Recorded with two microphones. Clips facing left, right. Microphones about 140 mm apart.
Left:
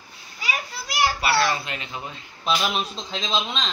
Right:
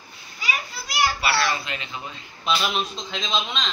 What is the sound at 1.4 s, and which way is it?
Speech, 45° left (ahead or behind).